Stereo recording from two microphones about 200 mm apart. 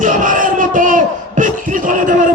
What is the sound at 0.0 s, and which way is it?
Speech, 40° right (ahead or behind).